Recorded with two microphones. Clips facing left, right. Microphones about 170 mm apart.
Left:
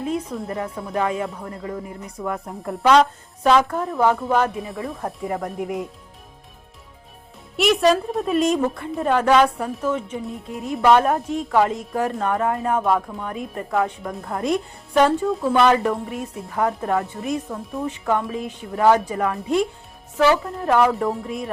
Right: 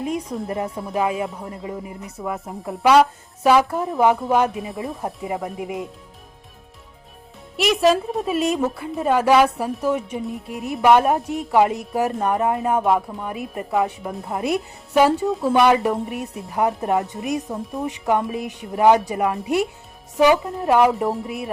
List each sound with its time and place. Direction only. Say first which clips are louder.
0.0 s a woman's voice: even; 10° right (ahead or behind)
0.9 s speech: even; 10° right (ahead or behind)
4.5 s a woman's voice: right 1 dB; centre (ahead or behind)
7.5 s a woman's voice: even; centre (ahead or behind)